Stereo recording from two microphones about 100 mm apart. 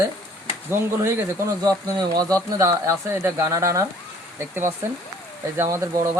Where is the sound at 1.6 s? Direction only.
40° right (ahead or behind).